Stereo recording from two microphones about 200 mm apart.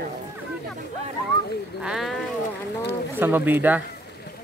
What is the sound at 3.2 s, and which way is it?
Speech, 10° right (ahead or behind).